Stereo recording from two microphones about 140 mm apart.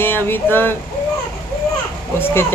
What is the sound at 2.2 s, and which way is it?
Speech, 15° left (ahead or behind).